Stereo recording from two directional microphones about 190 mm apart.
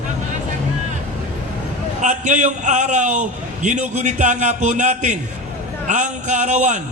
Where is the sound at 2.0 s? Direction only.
40° right (ahead or behind).